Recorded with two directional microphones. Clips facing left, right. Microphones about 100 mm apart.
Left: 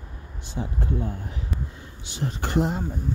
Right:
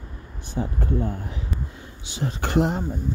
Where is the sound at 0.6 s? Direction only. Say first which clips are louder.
Right 3 dB; 45° right (ahead or behind).